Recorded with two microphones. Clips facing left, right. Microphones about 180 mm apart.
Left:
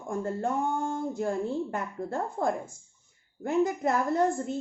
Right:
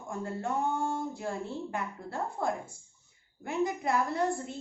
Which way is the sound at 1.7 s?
50° left (ahead or behind).